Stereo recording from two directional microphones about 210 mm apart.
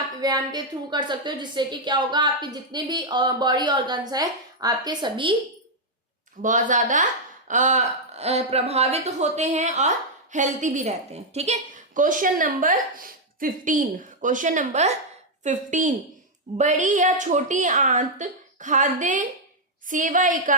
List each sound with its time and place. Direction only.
0.2 s a woman's voice: 20° right (ahead or behind)
6.4 s a woman's voice: 35° right (ahead or behind)